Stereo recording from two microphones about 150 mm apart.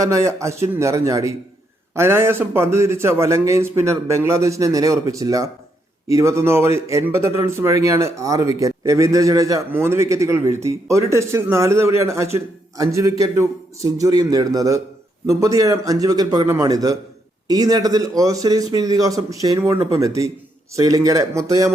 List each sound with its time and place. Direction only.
0.0 s speech: 20° right (ahead or behind)